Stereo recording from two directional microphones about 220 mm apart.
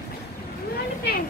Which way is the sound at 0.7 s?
45° left (ahead or behind).